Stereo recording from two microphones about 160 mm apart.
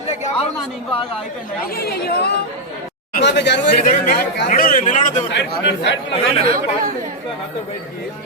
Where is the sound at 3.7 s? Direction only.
55° left (ahead or behind).